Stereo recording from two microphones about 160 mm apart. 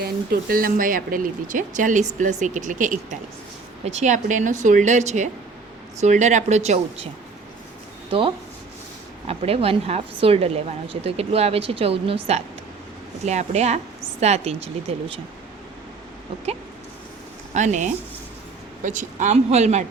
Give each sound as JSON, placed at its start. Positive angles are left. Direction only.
{"t": 0.0, "sound": "a woman's voice", "side_deg": -70}
{"t": 9.2, "sound": "a woman's voice", "side_deg": -40}
{"t": 17.5, "sound": "a woman's voice", "side_deg": -50}